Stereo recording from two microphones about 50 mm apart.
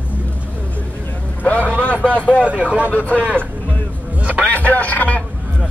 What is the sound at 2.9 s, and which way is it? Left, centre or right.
Speech, left.